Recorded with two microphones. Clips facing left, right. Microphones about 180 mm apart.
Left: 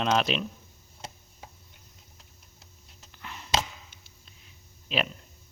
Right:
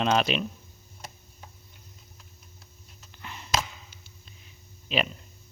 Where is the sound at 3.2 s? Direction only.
Centre (ahead or behind).